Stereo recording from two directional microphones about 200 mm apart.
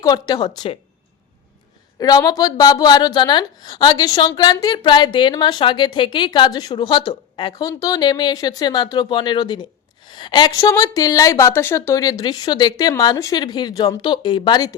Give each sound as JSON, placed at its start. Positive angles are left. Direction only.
{"t": 0.0, "sound": "a woman's voice", "side_deg": 20}
{"t": 2.0, "sound": "a woman's voice", "side_deg": 20}